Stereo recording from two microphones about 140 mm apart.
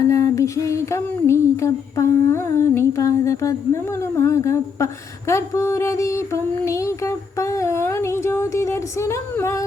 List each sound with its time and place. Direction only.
0.0 s music: 25° left (ahead or behind)